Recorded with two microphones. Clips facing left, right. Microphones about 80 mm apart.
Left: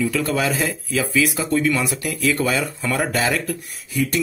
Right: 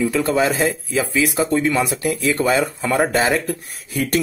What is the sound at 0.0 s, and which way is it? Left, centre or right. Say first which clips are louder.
Speech: right 3 dB; right.